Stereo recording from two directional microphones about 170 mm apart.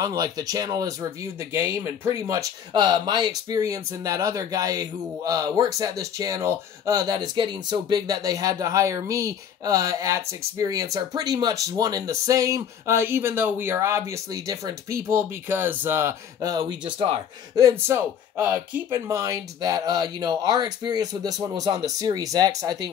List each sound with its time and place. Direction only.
0.0 s speech: 20° right (ahead or behind)
17.6 s speech: 15° right (ahead or behind)